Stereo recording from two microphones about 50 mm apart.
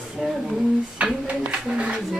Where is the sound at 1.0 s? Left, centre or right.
Right.